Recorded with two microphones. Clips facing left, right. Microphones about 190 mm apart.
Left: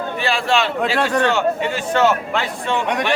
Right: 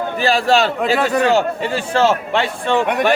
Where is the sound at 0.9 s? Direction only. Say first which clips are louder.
Right 1 dB; 5° right (ahead or behind).